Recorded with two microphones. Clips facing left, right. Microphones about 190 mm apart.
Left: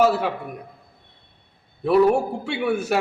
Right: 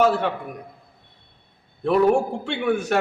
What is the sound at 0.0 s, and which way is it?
Speech, 5° left (ahead or behind).